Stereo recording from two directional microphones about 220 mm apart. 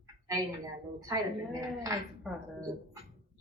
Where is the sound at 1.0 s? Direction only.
15° right (ahead or behind).